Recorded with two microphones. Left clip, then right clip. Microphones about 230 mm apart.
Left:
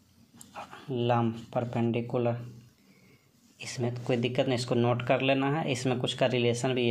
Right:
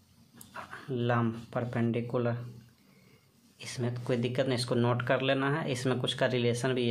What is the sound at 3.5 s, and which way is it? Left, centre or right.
Speech, centre.